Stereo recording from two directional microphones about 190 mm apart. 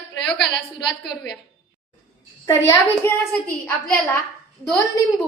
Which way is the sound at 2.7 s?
15° left (ahead or behind).